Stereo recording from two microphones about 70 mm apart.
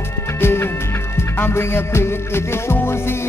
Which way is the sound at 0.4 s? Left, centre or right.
Left.